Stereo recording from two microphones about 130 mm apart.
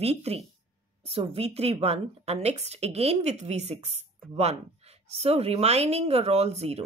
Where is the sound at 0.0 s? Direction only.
50° right (ahead or behind).